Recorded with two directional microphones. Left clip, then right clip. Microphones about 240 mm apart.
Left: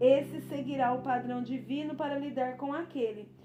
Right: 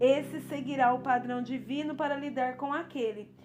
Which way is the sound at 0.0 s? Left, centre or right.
Right.